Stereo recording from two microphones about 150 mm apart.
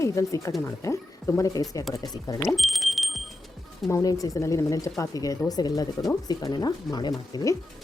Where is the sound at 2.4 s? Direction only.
Centre (ahead or behind).